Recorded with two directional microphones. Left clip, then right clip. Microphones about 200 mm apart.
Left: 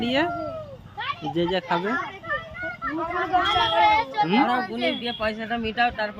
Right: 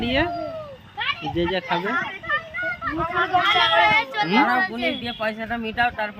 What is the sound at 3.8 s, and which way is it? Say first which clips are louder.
Speech: right 1 dB; 25° right (ahead or behind).